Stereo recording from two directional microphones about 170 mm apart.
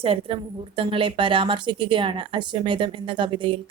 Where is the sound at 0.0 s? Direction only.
35° right (ahead or behind).